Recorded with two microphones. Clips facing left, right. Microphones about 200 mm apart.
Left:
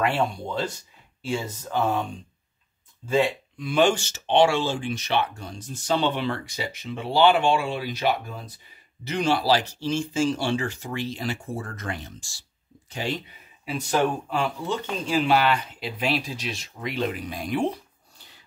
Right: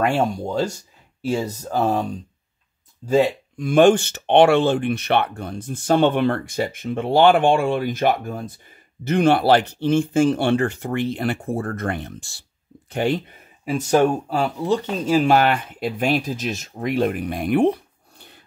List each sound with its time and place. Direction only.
0.0 s speech: 45° right (ahead or behind)